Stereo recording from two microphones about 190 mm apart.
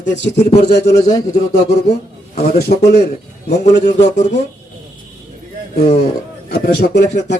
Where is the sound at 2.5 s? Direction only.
55° left (ahead or behind).